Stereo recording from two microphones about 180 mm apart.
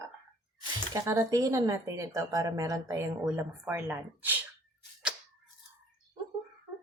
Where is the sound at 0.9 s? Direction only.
20° right (ahead or behind).